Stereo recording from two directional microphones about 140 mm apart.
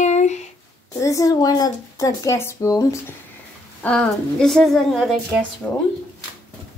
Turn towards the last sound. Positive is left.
turn(degrees=15)  # may be behind; listen again after turning